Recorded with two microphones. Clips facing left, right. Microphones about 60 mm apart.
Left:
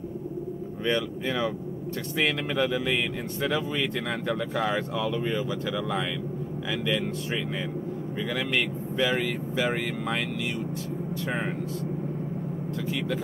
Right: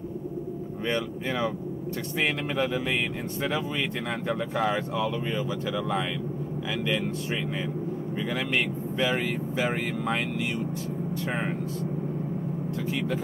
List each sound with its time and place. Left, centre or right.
0.8 s speech: centre
5.2 s speech: centre
11.2 s speech: centre
12.7 s speech: centre